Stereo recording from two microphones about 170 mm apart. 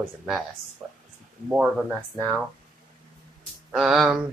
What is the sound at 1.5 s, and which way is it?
Speech, 5° right (ahead or behind).